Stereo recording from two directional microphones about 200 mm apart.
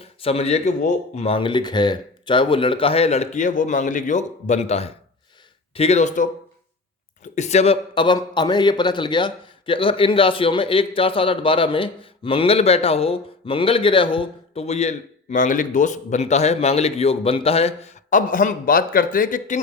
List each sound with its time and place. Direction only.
0.0 s speech: 30° left (ahead or behind)
7.3 s a man's voice: 35° left (ahead or behind)